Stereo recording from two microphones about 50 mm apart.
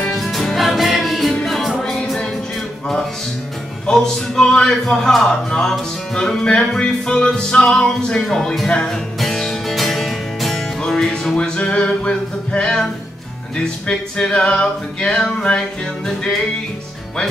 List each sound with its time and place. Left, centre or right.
0.1 s music: centre
1.8 s music: centre
3.8 s a man's voice: centre
8.6 s music: centre
11.3 s music: left